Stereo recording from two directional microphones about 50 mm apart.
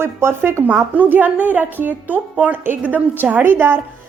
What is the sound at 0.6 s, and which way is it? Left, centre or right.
Speech, right.